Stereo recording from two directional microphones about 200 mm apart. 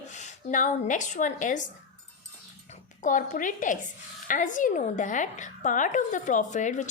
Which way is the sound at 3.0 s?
40° left (ahead or behind).